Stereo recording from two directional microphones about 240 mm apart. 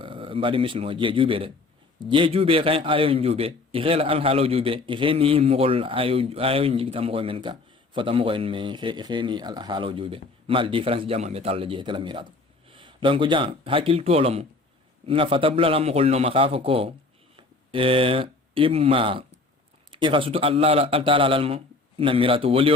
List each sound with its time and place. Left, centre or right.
0.0 s a man's voice: right